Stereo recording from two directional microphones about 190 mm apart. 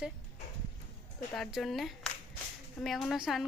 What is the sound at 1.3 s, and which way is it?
A woman's voice, centre (ahead or behind).